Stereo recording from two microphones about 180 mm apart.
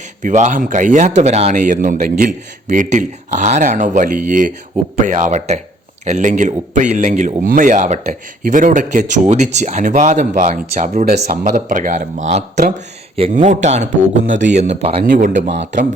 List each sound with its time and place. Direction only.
0.2 s a man's voice: 40° right (ahead or behind)
11.1 s speech: 65° right (ahead or behind)
11.4 s a man's voice: 45° right (ahead or behind)
14.3 s speech: 90° right
14.5 s a man's voice: 40° right (ahead or behind)
15.0 s speech: 50° right (ahead or behind)